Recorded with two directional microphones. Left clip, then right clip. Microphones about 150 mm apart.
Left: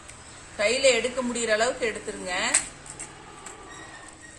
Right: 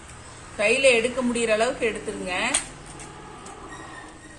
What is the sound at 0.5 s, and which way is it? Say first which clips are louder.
A woman's voice: right 3 dB; 15° left (ahead or behind).